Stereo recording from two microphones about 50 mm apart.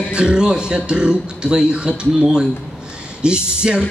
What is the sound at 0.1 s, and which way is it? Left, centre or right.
Music, centre.